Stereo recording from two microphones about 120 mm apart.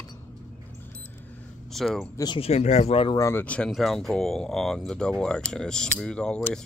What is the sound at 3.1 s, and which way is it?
Speech, 25° left (ahead or behind).